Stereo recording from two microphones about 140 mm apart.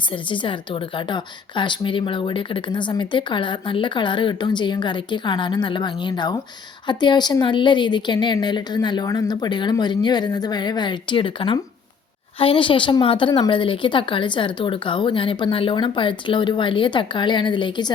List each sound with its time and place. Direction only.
0.1 s a woman's voice: 35° left (ahead or behind)